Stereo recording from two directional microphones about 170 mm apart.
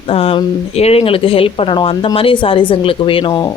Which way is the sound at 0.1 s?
35° left (ahead or behind).